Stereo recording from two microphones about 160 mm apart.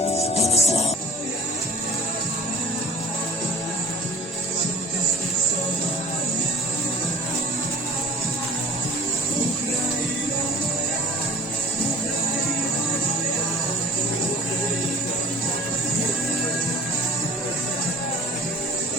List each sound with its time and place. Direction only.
0.0 s music: 40° left (ahead or behind)